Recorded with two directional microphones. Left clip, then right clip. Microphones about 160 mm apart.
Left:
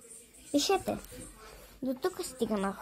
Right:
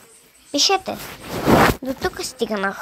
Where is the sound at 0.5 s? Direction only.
25° right (ahead or behind).